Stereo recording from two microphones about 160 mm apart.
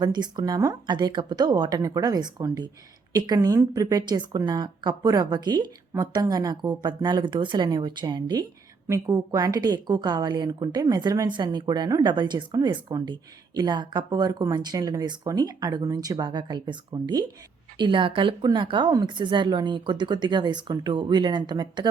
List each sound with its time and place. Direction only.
0.0 s a woman's voice: 25° right (ahead or behind)